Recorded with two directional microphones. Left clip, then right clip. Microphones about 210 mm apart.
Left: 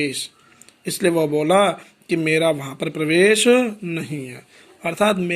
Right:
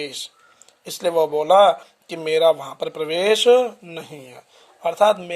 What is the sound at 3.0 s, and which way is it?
Speech, 5° left (ahead or behind).